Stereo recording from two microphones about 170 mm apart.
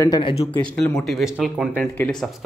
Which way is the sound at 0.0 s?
25° left (ahead or behind).